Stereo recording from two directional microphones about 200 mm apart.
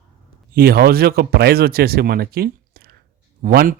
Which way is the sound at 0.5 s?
50° right (ahead or behind).